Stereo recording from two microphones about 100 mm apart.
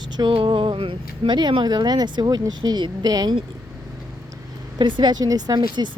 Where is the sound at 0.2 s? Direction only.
55° right (ahead or behind).